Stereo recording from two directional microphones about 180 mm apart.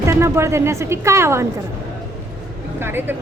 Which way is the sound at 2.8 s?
10° right (ahead or behind).